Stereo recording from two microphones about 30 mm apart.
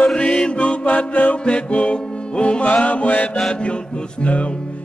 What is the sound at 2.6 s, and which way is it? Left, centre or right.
Music, left.